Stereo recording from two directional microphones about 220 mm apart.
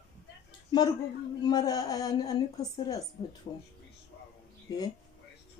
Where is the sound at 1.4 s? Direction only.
20° left (ahead or behind).